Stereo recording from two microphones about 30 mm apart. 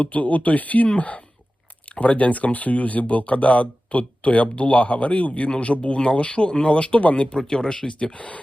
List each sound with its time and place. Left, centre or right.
0.0 s speech: left
7.3 s speech: left
7.9 s speech: left